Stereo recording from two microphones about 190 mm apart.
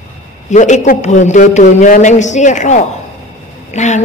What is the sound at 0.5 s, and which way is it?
A woman's voice, 40° left (ahead or behind).